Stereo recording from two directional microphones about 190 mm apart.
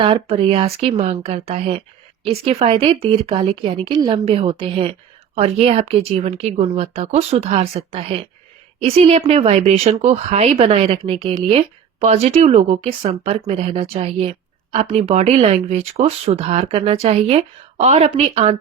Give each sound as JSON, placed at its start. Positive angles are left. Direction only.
{"t": 0.0, "sound": "speech", "side_deg": -30}